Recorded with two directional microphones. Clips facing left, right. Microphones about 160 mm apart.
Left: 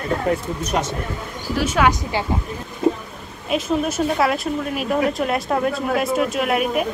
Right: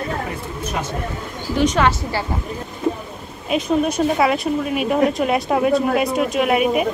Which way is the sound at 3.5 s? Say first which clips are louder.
Right 2 dB; centre (ahead or behind).